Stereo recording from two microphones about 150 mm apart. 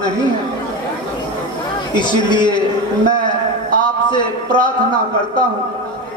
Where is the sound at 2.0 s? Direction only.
30° left (ahead or behind).